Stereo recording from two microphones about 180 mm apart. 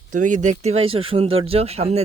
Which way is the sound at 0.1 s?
45° right (ahead or behind).